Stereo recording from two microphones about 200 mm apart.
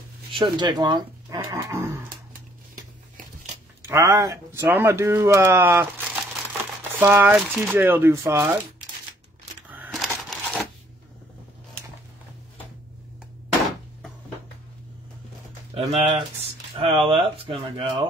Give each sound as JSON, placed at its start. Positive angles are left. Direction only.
{"t": 0.3, "sound": "speech", "side_deg": -25}
{"t": 3.8, "sound": "speech", "side_deg": -15}
{"t": 9.7, "sound": "a sound", "side_deg": -10}
{"t": 15.7, "sound": "speech", "side_deg": -30}